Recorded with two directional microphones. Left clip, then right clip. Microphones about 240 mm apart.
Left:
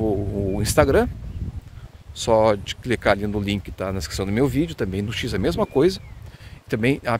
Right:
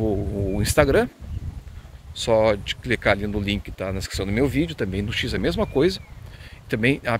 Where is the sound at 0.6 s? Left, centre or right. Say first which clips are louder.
Left 1 dB; centre.